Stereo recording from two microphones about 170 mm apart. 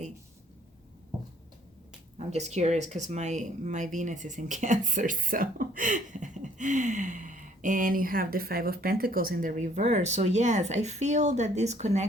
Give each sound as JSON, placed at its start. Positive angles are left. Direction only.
{"t": 2.1, "sound": "speech", "side_deg": -40}